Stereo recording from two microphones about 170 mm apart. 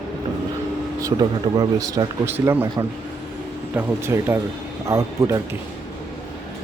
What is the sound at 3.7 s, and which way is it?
Speech, 15° right (ahead or behind).